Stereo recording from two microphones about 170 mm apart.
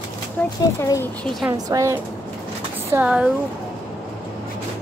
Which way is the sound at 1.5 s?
20° right (ahead or behind).